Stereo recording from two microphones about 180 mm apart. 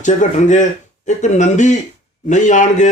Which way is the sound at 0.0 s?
45° left (ahead or behind).